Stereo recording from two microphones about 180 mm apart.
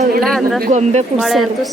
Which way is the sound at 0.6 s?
40° right (ahead or behind).